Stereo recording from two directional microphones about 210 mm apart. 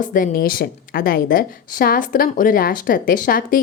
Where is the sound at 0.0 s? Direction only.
40° left (ahead or behind).